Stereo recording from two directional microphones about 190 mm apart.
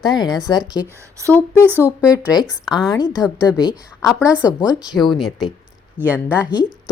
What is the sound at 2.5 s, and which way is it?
Speech, centre (ahead or behind).